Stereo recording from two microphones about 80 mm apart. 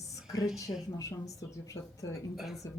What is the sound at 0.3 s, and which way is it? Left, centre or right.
Speech, left.